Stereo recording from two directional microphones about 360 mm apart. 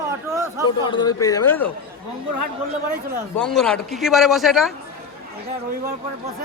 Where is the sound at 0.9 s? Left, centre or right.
Centre.